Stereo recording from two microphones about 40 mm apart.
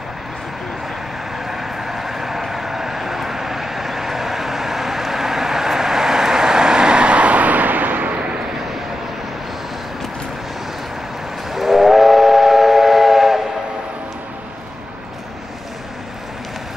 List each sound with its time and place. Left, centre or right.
1.4 s vehicle: centre; by 8.2 s right
8.2 s vehicle: right
11.5 s train: centre